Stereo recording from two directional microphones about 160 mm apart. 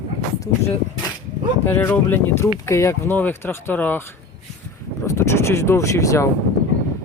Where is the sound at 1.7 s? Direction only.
15° left (ahead or behind).